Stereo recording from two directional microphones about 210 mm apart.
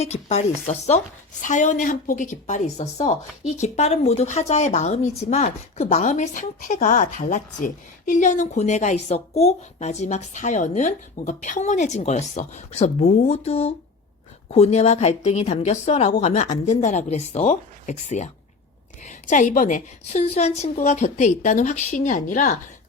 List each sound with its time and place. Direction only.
0.0 s a woman's voice: 30° left (ahead or behind)